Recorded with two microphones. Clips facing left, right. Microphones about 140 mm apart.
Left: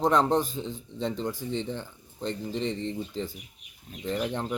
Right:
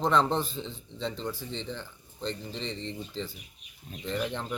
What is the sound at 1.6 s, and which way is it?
Speech, 15° left (ahead or behind).